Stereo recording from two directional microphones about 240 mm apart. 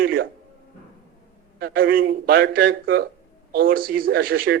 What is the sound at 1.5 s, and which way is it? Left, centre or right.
Speech, right.